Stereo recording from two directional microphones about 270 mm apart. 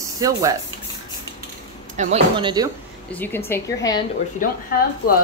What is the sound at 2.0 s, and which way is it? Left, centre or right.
Speech, right.